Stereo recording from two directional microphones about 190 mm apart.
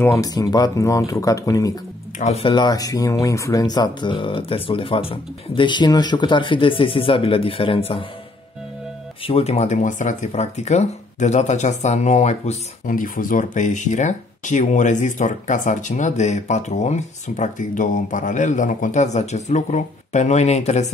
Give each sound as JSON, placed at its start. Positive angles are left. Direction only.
{"t": 0.0, "sound": "speech", "side_deg": 15}
{"t": 2.1, "sound": "speech", "side_deg": 35}
{"t": 9.2, "sound": "speech", "side_deg": 30}